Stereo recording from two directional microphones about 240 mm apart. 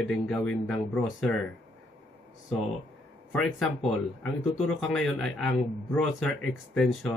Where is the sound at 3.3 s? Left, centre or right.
Centre.